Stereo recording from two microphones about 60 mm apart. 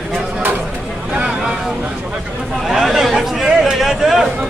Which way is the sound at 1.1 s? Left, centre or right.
Centre.